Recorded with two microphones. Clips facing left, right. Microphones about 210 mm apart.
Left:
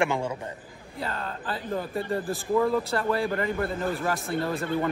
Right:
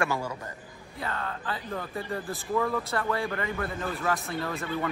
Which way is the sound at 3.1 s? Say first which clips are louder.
Left 4 dB; 30° left (ahead or behind).